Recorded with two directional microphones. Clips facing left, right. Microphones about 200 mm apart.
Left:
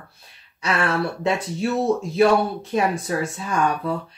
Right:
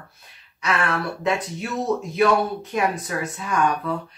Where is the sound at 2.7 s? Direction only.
30° left (ahead or behind).